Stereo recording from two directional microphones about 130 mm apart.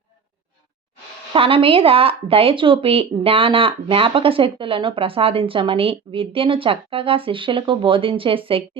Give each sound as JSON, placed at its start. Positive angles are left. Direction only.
{"t": 1.3, "sound": "speech", "side_deg": -45}